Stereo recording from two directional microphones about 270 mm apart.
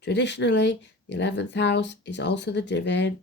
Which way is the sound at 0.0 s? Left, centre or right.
Left.